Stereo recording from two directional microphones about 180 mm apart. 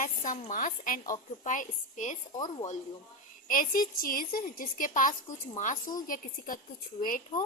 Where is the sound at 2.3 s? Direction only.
20° left (ahead or behind).